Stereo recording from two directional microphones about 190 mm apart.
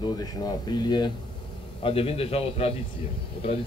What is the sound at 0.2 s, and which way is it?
A man's voice, 20° left (ahead or behind).